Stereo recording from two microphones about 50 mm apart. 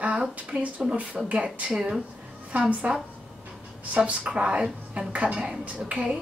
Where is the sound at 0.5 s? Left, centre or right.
Right.